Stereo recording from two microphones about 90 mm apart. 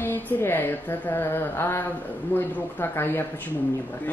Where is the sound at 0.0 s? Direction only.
25° left (ahead or behind).